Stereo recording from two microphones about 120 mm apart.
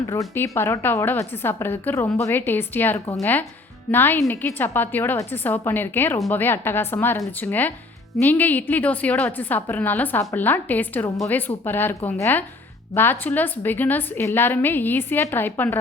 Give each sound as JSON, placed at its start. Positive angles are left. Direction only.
{"t": 0.1, "sound": "a woman's voice", "side_deg": 25}